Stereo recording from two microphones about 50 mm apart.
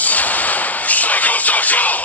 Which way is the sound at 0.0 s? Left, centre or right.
Left.